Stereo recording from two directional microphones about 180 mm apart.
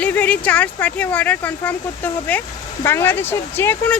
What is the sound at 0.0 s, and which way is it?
A woman's voice, 10° left (ahead or behind).